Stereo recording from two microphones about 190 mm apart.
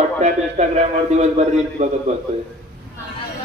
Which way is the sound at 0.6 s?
35° right (ahead or behind).